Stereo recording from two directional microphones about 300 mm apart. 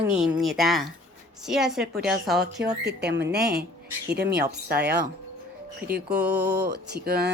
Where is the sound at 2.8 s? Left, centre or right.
Right.